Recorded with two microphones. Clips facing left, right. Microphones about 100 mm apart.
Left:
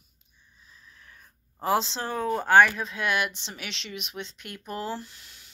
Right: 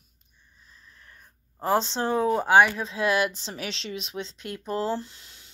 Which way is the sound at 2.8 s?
30° right (ahead or behind).